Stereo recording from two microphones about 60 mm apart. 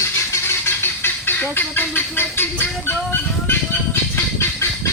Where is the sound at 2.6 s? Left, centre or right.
Left.